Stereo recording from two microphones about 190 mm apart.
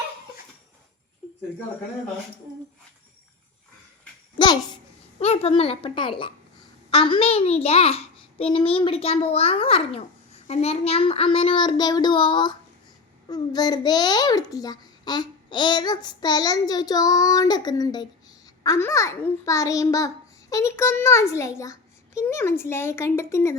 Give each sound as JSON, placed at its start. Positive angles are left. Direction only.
{"t": 5.2, "sound": "a child's voice", "side_deg": 30}